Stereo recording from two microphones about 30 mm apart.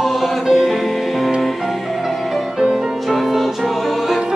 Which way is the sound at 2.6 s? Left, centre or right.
Centre.